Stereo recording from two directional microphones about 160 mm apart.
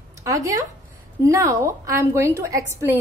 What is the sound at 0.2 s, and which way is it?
A woman's voice, 20° right (ahead or behind).